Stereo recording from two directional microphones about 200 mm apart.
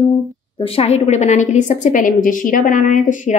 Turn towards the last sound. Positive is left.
turn(degrees=40)  # may be behind; listen again after turning